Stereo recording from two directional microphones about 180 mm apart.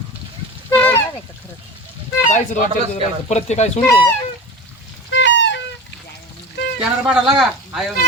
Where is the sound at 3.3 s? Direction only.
40° left (ahead or behind).